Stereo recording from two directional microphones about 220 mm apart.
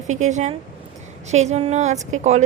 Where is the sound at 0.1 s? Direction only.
35° right (ahead or behind).